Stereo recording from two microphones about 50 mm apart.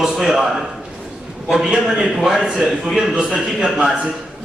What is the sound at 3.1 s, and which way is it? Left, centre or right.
Speech, right.